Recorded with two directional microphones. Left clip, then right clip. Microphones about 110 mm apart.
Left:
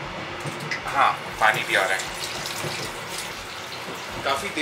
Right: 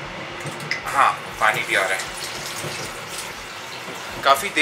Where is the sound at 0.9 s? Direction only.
5° left (ahead or behind).